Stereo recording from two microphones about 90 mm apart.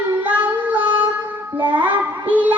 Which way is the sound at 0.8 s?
20° right (ahead or behind).